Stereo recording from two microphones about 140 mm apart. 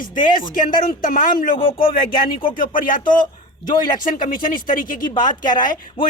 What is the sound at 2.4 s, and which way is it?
Speech, 80° left.